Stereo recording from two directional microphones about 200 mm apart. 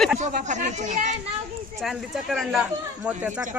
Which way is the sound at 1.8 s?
Centre (ahead or behind).